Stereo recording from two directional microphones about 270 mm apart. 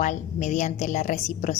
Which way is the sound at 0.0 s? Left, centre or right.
Left.